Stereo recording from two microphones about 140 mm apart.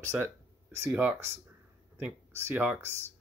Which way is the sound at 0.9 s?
10° right (ahead or behind).